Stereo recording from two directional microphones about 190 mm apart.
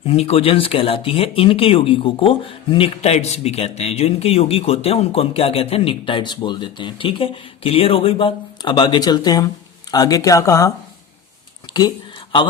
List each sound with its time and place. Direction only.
0.0 s speech: 30° left (ahead or behind)